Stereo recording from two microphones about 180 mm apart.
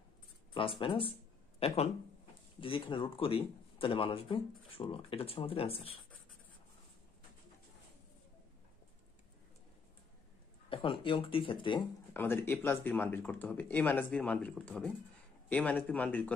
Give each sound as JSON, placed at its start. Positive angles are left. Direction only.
{"t": 0.6, "sound": "speech", "side_deg": 30}
{"t": 10.7, "sound": "speech", "side_deg": 30}
{"t": 12.1, "sound": "speech", "side_deg": 10}